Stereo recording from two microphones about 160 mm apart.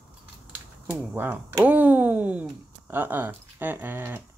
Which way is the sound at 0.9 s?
10° right (ahead or behind).